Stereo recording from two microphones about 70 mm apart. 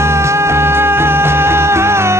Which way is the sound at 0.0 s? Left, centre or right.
Right.